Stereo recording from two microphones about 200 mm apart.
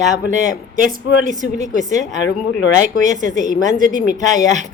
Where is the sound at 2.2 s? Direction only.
65° left (ahead or behind).